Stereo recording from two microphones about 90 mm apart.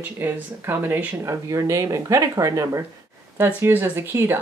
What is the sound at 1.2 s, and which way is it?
Speech, 35° right (ahead or behind).